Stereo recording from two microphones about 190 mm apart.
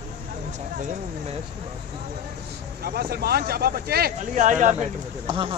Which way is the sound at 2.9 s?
55° right (ahead or behind).